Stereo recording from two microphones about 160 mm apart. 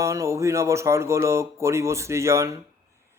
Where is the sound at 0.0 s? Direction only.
20° right (ahead or behind).